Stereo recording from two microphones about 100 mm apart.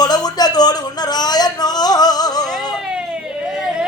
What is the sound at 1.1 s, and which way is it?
Music, 45° left (ahead or behind).